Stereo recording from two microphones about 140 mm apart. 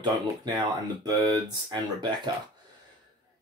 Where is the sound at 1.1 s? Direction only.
25° right (ahead or behind).